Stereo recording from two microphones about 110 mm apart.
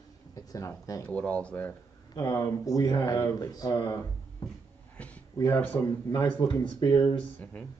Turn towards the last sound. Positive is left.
turn(degrees=45)  # may be behind; listen again after turning